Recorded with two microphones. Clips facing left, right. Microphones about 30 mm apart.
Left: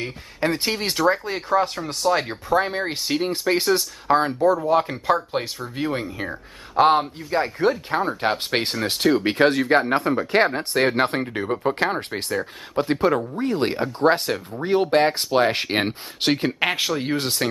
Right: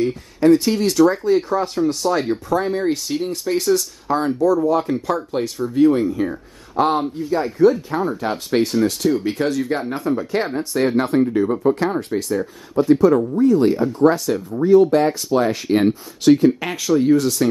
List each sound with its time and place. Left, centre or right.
0.0 s speech: left
2.5 s speech: left
7.2 s speech: left